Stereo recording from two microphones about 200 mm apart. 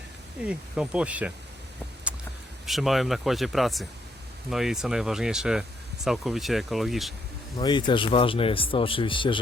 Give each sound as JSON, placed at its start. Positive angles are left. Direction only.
{"t": 0.4, "sound": "speech", "side_deg": -5}
{"t": 2.6, "sound": "speech", "side_deg": 0}
{"t": 7.6, "sound": "speech", "side_deg": 25}